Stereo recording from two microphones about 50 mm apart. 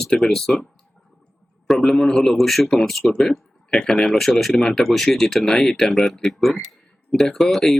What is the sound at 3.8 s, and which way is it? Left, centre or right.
Speech, centre.